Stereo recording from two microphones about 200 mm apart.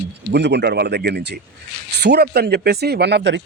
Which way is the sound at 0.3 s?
60° right (ahead or behind).